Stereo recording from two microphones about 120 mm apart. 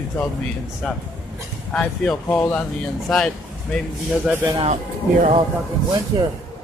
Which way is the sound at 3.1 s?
5° left (ahead or behind).